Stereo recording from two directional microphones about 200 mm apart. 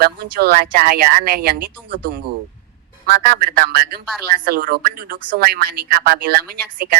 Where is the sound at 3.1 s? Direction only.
45° right (ahead or behind).